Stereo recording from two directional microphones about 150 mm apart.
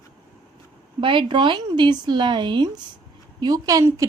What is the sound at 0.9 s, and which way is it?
A woman's voice, 35° right (ahead or behind).